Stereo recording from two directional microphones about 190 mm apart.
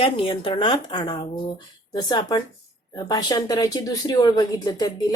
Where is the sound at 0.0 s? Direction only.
30° left (ahead or behind).